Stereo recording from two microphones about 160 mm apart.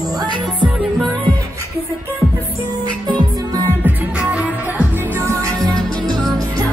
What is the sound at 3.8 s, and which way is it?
Music, 10° right (ahead or behind).